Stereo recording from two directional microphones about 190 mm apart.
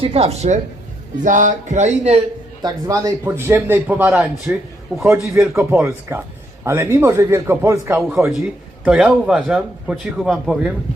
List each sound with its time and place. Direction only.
0.0 s speech: 30° right (ahead or behind)
2.6 s a man's voice: 20° right (ahead or behind); by 10.7 s centre (ahead or behind)